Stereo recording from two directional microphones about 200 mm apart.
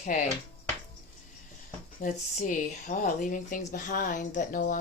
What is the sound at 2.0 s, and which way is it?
Speech, 40° left (ahead or behind).